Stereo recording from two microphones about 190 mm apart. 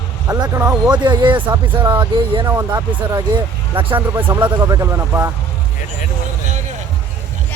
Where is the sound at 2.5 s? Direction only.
15° right (ahead or behind).